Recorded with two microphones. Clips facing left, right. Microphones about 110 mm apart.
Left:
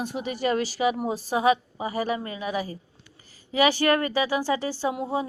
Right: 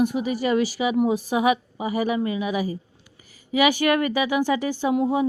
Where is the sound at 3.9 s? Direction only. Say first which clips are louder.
Right 2 dB; 30° left (ahead or behind).